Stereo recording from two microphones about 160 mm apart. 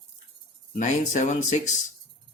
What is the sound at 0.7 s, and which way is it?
Speech, 50° left (ahead or behind).